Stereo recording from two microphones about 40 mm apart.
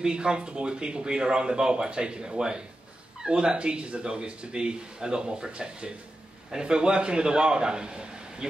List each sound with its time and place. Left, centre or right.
0.1 s speech: right